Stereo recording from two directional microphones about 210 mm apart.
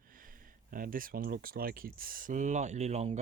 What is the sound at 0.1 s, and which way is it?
Speech, 40° right (ahead or behind).